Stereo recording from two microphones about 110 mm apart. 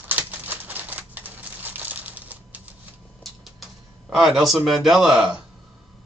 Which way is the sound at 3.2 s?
Centre (ahead or behind).